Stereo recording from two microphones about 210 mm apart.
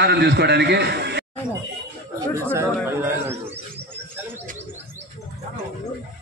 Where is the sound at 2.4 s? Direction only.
10° right (ahead or behind).